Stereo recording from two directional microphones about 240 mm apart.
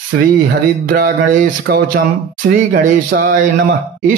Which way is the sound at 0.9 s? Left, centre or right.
Right.